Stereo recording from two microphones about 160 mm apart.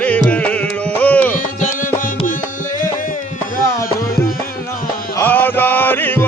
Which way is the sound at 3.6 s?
20° left (ahead or behind).